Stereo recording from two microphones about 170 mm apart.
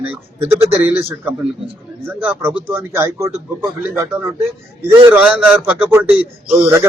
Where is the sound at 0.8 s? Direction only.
10° right (ahead or behind).